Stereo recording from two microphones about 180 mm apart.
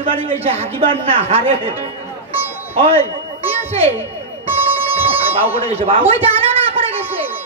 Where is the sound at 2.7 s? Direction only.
35° right (ahead or behind).